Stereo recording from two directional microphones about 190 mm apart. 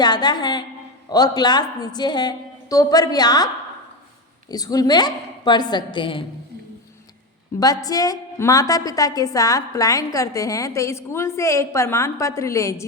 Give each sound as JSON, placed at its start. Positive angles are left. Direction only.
{"t": 0.0, "sound": "a woman's voice", "side_deg": 20}
{"t": 4.5, "sound": "a woman's voice", "side_deg": 20}
{"t": 7.6, "sound": "a woman's voice", "side_deg": 20}